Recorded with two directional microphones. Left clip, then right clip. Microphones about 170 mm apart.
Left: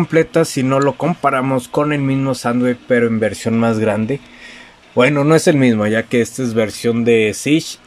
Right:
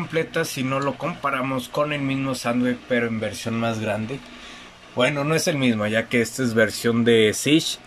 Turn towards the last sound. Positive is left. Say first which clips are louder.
# left 3 dB
turn(degrees=5)  # may be behind; listen again after turning